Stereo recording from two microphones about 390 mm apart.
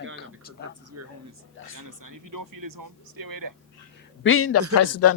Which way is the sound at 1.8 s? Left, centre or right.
Right.